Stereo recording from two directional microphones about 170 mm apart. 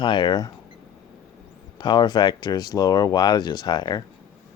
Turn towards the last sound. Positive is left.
turn(degrees=25)  # may be behind; listen again after turning